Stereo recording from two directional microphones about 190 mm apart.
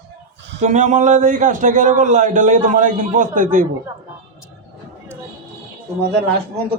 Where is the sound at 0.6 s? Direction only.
40° right (ahead or behind).